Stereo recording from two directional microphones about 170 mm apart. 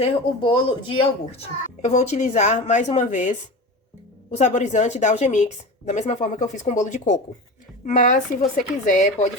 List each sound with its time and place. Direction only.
0.0 s speech: 30° left (ahead or behind); by 3.3 s 45° left (ahead or behind)
4.4 s speech: 45° left (ahead or behind)